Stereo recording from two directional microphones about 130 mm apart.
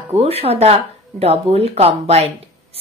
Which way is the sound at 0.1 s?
50° right (ahead or behind).